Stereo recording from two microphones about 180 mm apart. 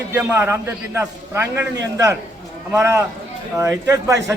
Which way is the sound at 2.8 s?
15° right (ahead or behind).